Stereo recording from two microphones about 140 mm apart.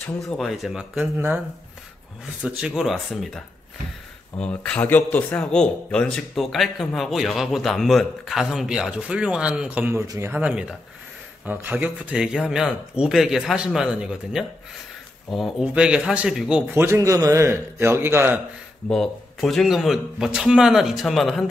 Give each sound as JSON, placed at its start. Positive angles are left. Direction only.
{"t": 0.2, "sound": "a man's voice", "side_deg": 0}
{"t": 1.1, "sound": "a man's voice", "side_deg": -15}
{"t": 2.4, "sound": "a man's voice", "side_deg": -5}
{"t": 10.0, "sound": "a man's voice", "side_deg": -25}
{"t": 10.3, "sound": "a man's voice", "side_deg": -10}
{"t": 16.8, "sound": "a man's voice", "side_deg": -20}
{"t": 18.9, "sound": "a man's voice", "side_deg": 5}